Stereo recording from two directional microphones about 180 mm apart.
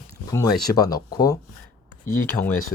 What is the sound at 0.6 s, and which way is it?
Speech, 20° left (ahead or behind).